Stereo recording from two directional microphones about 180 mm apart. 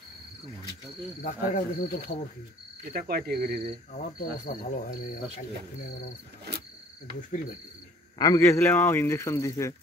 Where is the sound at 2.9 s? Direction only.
55° right (ahead or behind).